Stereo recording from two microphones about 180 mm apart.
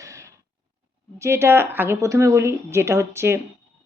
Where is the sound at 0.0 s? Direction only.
15° right (ahead or behind).